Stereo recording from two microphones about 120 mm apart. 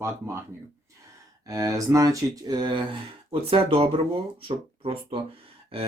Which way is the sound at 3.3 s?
50° right (ahead or behind).